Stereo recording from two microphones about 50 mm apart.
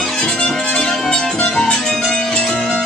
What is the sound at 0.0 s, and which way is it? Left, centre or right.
Music, centre.